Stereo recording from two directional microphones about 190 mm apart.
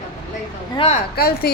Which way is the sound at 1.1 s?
55° left (ahead or behind).